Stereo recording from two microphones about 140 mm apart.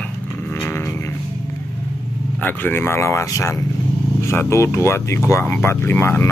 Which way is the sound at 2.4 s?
15° left (ahead or behind).